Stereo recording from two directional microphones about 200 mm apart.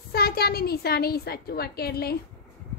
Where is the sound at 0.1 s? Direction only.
50° left (ahead or behind).